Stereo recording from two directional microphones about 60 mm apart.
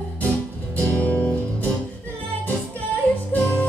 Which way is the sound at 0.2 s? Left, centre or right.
Left.